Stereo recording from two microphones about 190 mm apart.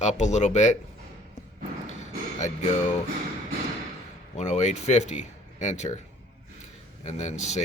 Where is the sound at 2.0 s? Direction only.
40° left (ahead or behind).